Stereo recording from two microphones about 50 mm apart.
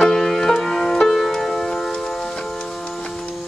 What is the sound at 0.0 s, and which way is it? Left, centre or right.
Music, centre.